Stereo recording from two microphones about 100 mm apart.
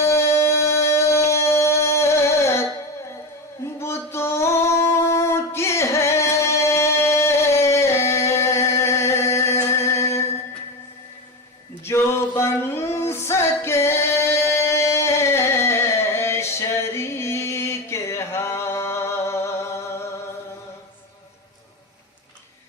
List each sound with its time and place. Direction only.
0.0 s a sound: 25° left (ahead or behind)
2.4 s music: 25° left (ahead or behind)
3.8 s singing: 25° left (ahead or behind)
11.9 s music: 25° left (ahead or behind)